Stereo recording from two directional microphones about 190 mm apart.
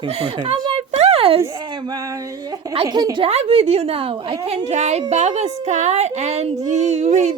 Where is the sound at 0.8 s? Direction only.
35° right (ahead or behind).